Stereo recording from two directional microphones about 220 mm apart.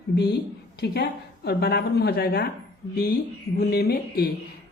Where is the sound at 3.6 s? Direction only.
45° left (ahead or behind).